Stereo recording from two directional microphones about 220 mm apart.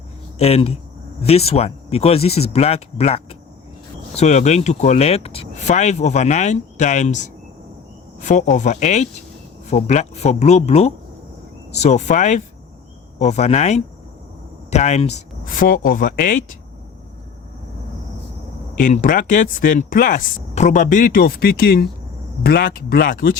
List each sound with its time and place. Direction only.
0.3 s speech: 30° left (ahead or behind)
18.8 s speech: 35° left (ahead or behind)